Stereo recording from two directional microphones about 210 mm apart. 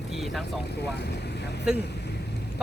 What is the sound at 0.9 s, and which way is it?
Speech, 50° left (ahead or behind).